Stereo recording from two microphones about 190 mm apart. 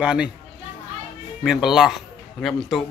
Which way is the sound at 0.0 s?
5° right (ahead or behind).